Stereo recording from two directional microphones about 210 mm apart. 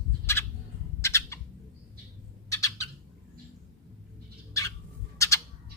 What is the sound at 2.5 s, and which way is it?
Squawk, 15° left (ahead or behind).